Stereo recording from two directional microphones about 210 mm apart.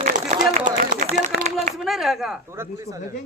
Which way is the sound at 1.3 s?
35° right (ahead or behind).